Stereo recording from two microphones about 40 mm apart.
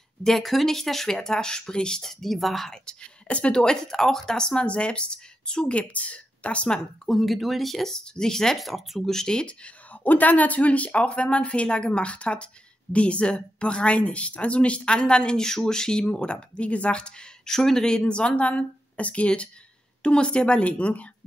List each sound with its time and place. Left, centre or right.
0.2 s speech: centre
2.0 s speech: centre
2.7 s a woman's voice: centre
3.3 s speech: left
3.6 s speech: centre
4.6 s a woman's voice: left
7.1 s speech: centre
8.5 s speech: centre
9.1 s speech: centre
10.0 s a woman's voice: left
17.5 s a woman's voice: centre; by 21.1 s left